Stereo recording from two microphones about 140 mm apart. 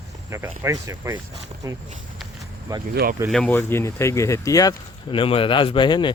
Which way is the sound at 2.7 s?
25° right (ahead or behind).